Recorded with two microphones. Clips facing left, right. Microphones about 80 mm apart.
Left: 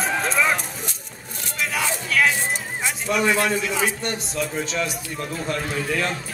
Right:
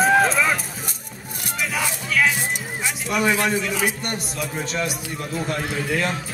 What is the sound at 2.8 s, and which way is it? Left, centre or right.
Speech, centre.